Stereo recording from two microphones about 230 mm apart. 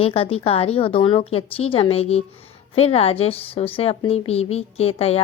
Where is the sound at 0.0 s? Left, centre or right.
Left.